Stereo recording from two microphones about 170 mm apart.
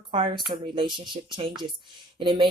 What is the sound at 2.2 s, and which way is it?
Speech, 30° right (ahead or behind).